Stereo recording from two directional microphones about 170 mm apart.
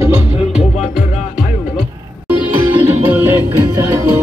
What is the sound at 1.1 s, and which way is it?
Music, 45° left (ahead or behind).